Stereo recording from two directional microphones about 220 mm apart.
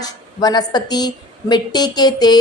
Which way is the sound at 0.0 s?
15° left (ahead or behind).